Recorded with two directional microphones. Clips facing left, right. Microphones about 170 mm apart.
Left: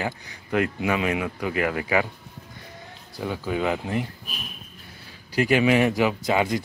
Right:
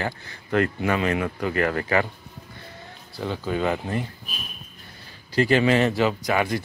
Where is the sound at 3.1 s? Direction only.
10° left (ahead or behind).